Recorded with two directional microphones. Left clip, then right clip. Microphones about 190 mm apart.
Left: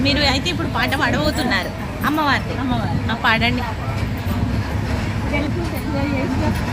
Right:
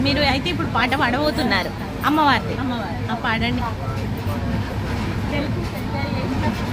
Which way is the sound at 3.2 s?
10° right (ahead or behind).